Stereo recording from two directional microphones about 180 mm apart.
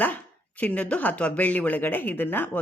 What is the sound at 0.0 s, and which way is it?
Speech, 10° left (ahead or behind).